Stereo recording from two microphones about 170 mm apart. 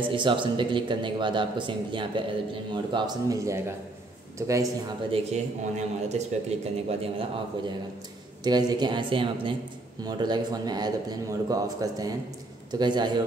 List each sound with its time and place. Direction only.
0.1 s speech: 30° right (ahead or behind)
5.1 s speech: 40° right (ahead or behind)
8.5 s speech: 25° right (ahead or behind)